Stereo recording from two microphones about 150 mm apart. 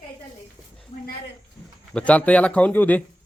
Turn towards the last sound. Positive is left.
turn(degrees=10)  # may be behind; listen again after turning